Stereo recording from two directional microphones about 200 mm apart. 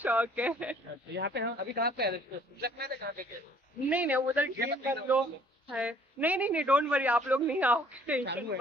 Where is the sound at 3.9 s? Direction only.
10° right (ahead or behind).